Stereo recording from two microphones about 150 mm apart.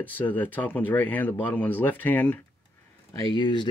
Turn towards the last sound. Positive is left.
turn(degrees=30)  # may be behind; listen again after turning